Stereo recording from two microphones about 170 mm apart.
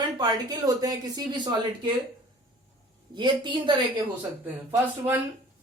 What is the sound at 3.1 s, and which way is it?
Speech, 25° right (ahead or behind).